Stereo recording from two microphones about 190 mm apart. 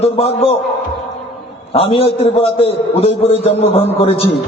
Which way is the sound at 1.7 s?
30° left (ahead or behind).